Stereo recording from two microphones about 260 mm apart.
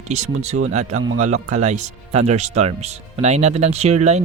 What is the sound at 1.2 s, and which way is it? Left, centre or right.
Speech, right.